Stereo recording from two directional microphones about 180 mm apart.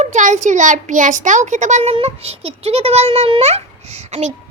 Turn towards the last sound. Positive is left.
turn(degrees=-40)  # may be behind; listen again after turning